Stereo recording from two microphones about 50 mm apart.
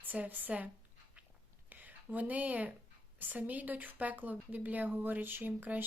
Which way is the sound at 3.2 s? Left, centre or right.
Right.